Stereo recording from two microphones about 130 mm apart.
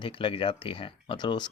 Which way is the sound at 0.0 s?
40° left (ahead or behind).